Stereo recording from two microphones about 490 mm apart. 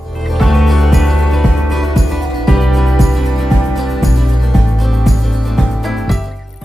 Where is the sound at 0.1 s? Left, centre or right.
Centre.